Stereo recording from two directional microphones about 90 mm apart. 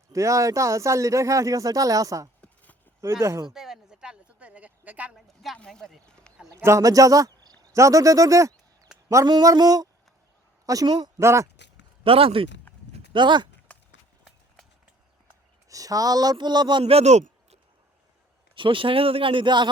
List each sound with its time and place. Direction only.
0.1 s speech: 35° right (ahead or behind)
2.4 s a sound: 20° left (ahead or behind)
3.0 s speech: 30° right (ahead or behind)
3.5 s a sound: 5° right (ahead or behind)
4.9 s speech: 15° right (ahead or behind)
5.1 s a sound: centre (ahead or behind)
5.5 s speech: 10° left (ahead or behind)
6.6 s speech: 35° right (ahead or behind); by 11.1 s 50° right (ahead or behind)
11.2 s speech: 30° right (ahead or behind)
12.0 s speech: 90° right
13.1 s speech: 60° right (ahead or behind)
13.7 s run: 15° left (ahead or behind)
15.7 s speech: 40° right (ahead or behind); by 17.0 s 60° right (ahead or behind)
18.5 s speech: 70° right (ahead or behind)